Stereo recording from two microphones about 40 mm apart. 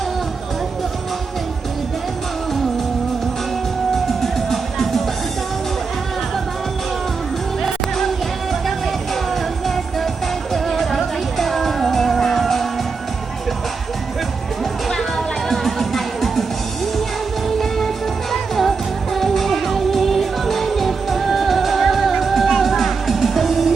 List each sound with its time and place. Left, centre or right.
4.2 s music: centre
7.6 s music: centre
9.3 s music: centre
14.6 s music: centre
17.6 s music: centre